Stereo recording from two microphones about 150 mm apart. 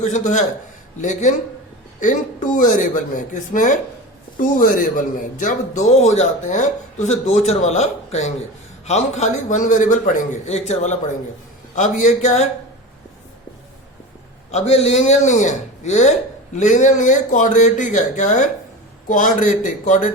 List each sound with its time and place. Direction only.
0.0 s speech: 55° left (ahead or behind)
2.0 s speech: 60° left (ahead or behind)
14.5 s speech: 45° left (ahead or behind)